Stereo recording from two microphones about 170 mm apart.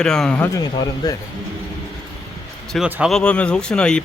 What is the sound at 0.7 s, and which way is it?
Speech, 25° left (ahead or behind).